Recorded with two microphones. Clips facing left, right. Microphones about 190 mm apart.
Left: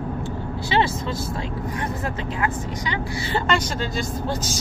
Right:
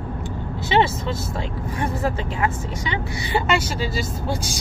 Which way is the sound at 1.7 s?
25° right (ahead or behind).